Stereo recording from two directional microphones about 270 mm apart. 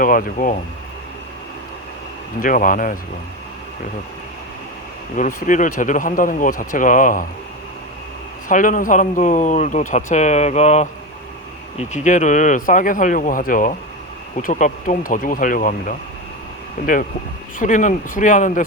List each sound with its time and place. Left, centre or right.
0.0 s speech: left
2.4 s speech: left
5.1 s speech: left
8.4 s speech: left